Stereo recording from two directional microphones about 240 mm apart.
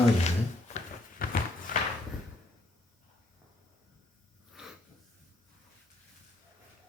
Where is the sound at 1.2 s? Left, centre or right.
Left.